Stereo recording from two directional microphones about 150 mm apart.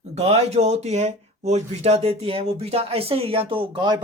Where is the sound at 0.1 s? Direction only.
45° right (ahead or behind).